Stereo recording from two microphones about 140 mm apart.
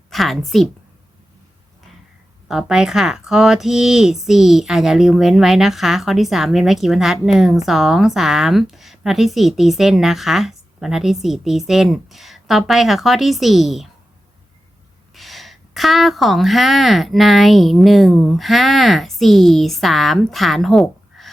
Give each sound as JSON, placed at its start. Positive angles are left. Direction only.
{"t": 0.1, "sound": "a woman's voice", "side_deg": 0}
{"t": 2.5, "sound": "speech", "side_deg": -5}
{"t": 15.1, "sound": "speech", "side_deg": 0}